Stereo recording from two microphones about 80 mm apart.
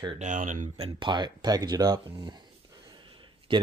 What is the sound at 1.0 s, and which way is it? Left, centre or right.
Speech, right.